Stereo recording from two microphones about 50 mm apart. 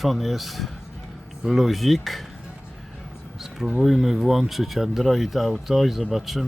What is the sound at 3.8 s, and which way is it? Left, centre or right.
Speech, centre.